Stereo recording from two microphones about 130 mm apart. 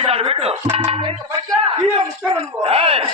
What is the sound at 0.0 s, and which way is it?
Music, 50° right (ahead or behind).